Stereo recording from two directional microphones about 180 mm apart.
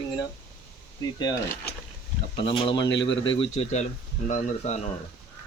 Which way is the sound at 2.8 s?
85° left.